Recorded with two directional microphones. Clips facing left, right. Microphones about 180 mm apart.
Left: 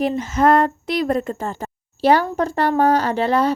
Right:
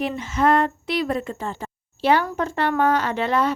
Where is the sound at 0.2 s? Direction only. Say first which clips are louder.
Left 2 dB; 40° left (ahead or behind).